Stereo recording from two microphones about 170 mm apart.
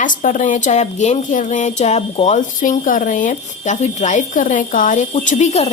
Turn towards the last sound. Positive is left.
turn(degrees=40)  # may be behind; listen again after turning